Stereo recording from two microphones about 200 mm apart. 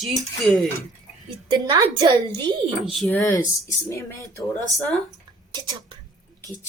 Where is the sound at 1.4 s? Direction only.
25° right (ahead or behind).